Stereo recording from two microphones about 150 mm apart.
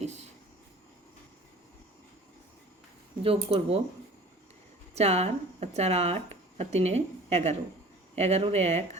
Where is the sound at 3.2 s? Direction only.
40° right (ahead or behind).